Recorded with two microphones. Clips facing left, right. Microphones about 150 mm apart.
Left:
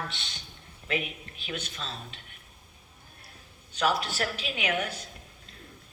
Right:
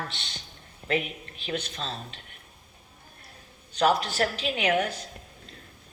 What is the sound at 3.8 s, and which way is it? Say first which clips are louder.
A man's voice: right 4 dB; 40° right (ahead or behind).